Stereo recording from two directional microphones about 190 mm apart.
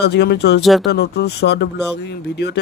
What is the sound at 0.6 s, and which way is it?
Speech, centre (ahead or behind).